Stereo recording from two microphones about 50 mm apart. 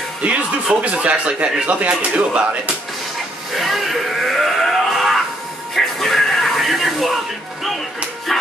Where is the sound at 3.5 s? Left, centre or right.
Centre.